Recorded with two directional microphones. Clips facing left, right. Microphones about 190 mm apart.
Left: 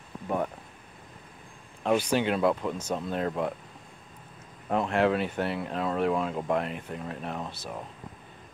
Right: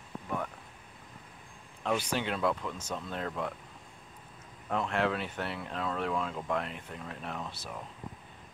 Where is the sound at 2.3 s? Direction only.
15° left (ahead or behind).